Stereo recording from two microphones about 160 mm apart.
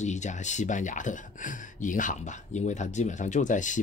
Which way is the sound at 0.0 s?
50° left (ahead or behind).